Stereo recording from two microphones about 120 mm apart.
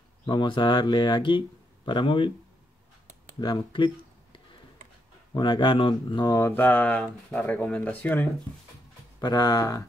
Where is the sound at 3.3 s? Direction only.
40° left (ahead or behind).